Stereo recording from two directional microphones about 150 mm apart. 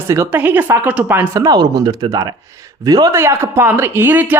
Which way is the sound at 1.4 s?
25° right (ahead or behind).